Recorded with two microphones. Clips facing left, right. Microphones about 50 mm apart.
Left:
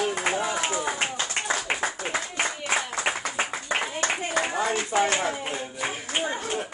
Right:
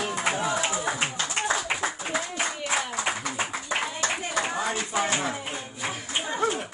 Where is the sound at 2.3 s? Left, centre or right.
Left.